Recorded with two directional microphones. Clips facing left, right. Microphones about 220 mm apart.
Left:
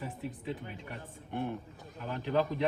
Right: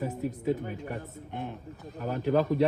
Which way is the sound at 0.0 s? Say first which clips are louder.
Right 9 dB; 45° right (ahead or behind).